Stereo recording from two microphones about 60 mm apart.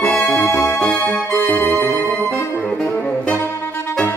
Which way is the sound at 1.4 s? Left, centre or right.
Left.